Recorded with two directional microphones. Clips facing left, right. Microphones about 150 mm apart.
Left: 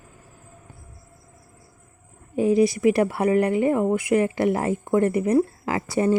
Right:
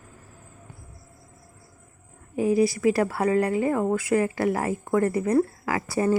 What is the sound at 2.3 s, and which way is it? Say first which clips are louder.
Speech: left 3 dB; 25° left (ahead or behind).